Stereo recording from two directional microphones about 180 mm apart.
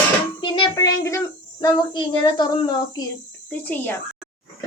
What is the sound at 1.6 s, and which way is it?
Speech, 25° left (ahead or behind).